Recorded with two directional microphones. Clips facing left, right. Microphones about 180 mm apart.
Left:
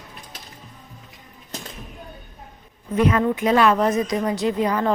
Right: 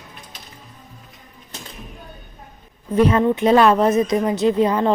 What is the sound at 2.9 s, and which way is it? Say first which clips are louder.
Speech: right 3 dB; 30° right (ahead or behind).